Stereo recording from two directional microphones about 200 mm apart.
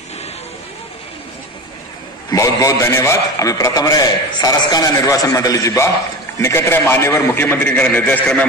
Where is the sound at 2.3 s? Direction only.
15° left (ahead or behind).